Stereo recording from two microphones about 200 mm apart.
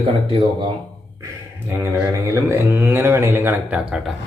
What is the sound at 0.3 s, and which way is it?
Speech, 25° right (ahead or behind).